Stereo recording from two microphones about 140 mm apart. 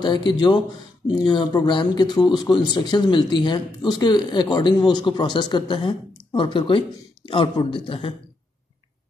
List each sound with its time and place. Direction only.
0.0 s speech: 35° left (ahead or behind)